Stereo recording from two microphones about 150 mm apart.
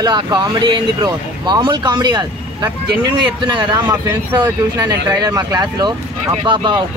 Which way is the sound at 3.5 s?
30° right (ahead or behind).